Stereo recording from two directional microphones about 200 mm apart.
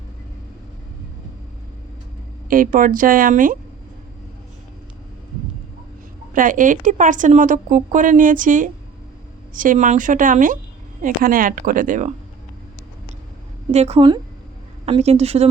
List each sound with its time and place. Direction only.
2.5 s speech: 45° right (ahead or behind)
6.3 s a woman's voice: 40° right (ahead or behind)
13.7 s a woman's voice: 30° right (ahead or behind)